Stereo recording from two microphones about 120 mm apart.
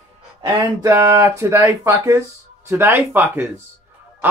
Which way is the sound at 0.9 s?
20° right (ahead or behind).